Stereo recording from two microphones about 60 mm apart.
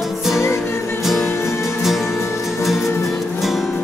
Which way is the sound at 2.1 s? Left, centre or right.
Left.